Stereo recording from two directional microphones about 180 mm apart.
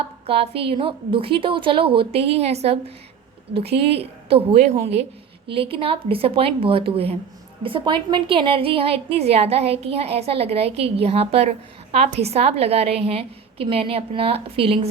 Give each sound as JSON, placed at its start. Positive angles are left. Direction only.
{"t": 0.3, "sound": "a woman's voice", "side_deg": -30}